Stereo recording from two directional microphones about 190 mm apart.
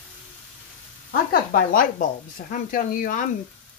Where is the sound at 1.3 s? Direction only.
45° left (ahead or behind).